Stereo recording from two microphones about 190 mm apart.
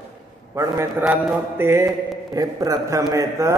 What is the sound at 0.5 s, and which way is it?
A man's voice, 15° right (ahead or behind).